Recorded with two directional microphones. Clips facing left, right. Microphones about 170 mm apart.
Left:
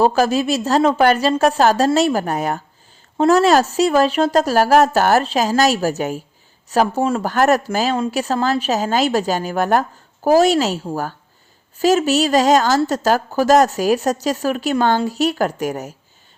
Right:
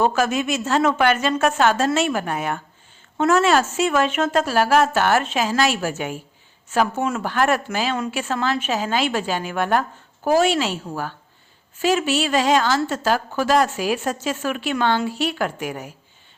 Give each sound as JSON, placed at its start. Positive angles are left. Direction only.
{"t": 0.0, "sound": "a woman's voice", "side_deg": 35}